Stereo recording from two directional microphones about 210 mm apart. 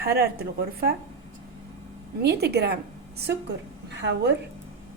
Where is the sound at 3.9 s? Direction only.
55° right (ahead or behind).